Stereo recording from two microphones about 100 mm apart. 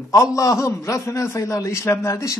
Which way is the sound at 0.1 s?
30° left (ahead or behind).